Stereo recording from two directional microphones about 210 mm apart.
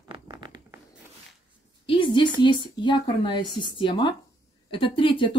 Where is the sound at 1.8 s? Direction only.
25° left (ahead or behind).